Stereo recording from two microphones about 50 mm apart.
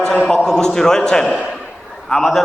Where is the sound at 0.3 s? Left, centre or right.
Centre.